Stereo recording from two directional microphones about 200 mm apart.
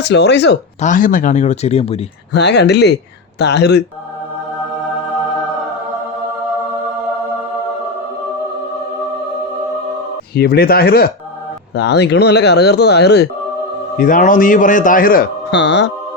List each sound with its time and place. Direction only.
0.0 s speech: 60° left (ahead or behind)
0.8 s speech: 40° left (ahead or behind)
2.3 s speech: 60° left (ahead or behind)
10.3 s a man's voice: 50° left (ahead or behind)
14.0 s a man's voice: 40° left (ahead or behind); by 15.9 s 60° left (ahead or behind)